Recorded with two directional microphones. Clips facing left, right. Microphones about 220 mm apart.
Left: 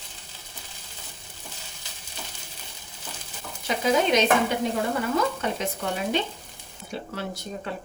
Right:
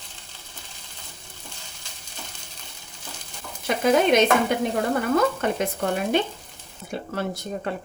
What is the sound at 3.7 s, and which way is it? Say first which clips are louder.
Stir: right 3 dB; 55° right (ahead or behind).